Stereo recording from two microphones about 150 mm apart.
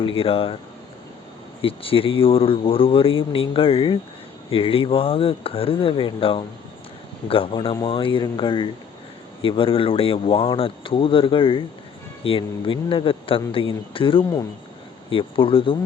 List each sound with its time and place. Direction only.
0.0 s speech: 35° left (ahead or behind)
1.6 s speech: 40° left (ahead or behind)